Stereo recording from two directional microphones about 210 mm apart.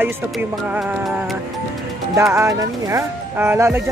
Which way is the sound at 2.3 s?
15° right (ahead or behind).